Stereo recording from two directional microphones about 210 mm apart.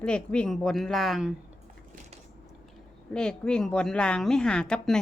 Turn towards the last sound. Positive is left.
turn(degrees=5)  # may be behind; listen again after turning